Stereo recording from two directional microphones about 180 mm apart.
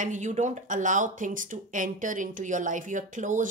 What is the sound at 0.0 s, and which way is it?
Speech, 45° right (ahead or behind).